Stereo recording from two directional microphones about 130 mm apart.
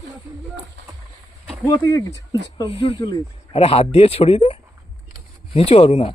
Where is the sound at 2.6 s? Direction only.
45° left (ahead or behind).